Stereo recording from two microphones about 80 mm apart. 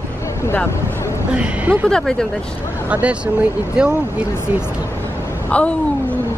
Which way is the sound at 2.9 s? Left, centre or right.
Centre.